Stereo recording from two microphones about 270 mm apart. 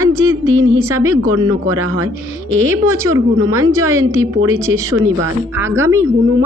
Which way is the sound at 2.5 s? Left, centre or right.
Right.